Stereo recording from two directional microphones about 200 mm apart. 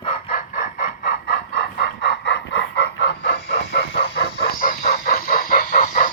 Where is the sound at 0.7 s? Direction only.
50° left (ahead or behind).